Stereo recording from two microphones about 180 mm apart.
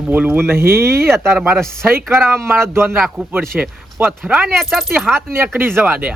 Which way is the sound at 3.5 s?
10° right (ahead or behind).